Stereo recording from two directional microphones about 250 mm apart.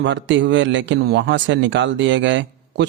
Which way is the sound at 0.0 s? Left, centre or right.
Right.